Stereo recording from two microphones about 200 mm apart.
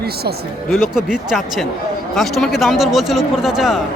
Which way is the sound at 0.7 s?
Centre (ahead or behind).